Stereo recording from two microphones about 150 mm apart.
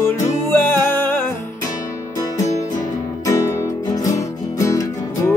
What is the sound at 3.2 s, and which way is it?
Music, 20° left (ahead or behind).